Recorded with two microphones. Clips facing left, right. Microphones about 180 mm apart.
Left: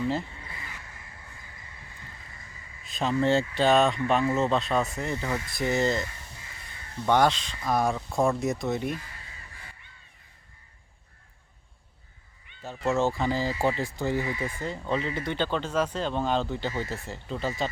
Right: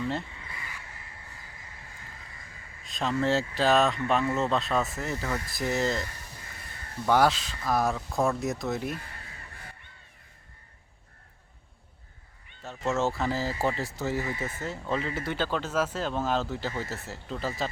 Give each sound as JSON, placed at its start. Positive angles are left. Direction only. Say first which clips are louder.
{"t": 2.8, "sound": "speech", "louder": "left 2 dB", "side_deg": 0}
{"t": 9.0, "sound": "crow", "louder": "right 1 dB", "side_deg": -55}
{"t": 12.6, "sound": "speech", "louder": "left 2 dB", "side_deg": 0}